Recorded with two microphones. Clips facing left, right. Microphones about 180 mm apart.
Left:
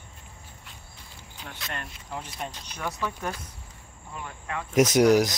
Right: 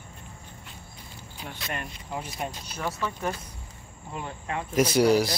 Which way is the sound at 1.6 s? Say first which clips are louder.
Right 2 dB; 10° right (ahead or behind).